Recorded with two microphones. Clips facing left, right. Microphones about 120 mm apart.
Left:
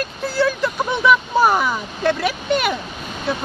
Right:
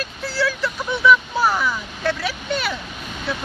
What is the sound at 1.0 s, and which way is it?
Vehicle, 50° left (ahead or behind).